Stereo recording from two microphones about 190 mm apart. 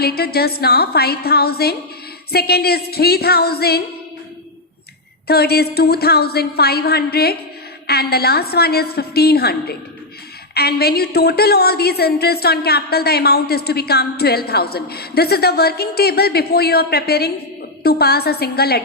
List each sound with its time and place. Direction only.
0.0 s a woman's voice: 55° left (ahead or behind)
5.3 s a woman's voice: 55° left (ahead or behind)